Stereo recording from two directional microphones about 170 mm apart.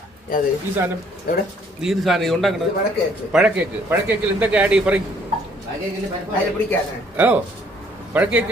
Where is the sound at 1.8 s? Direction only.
Centre (ahead or behind).